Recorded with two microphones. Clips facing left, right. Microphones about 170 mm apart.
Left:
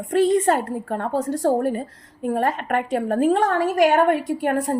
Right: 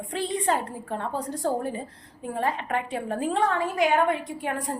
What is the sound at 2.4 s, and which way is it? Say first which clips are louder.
A woman's voice: left 1 dB; 50° left (ahead or behind).